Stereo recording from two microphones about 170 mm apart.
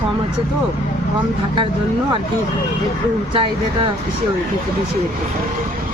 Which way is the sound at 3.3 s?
30° right (ahead or behind).